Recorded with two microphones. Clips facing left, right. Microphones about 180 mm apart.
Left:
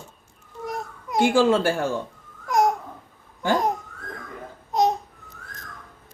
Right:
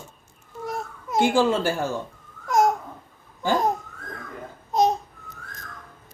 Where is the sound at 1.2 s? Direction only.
55° left (ahead or behind).